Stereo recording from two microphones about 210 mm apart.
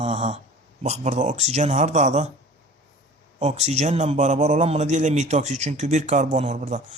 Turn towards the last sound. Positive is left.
turn(degrees=-35)  # may be behind; listen again after turning